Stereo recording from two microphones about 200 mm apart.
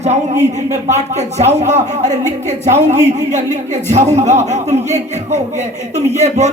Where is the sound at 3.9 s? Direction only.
35° right (ahead or behind).